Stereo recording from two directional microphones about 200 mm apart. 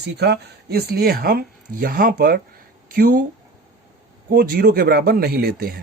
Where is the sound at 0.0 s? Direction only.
55° right (ahead or behind).